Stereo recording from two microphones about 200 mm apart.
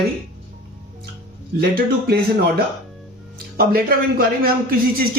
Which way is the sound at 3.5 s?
50° right (ahead or behind).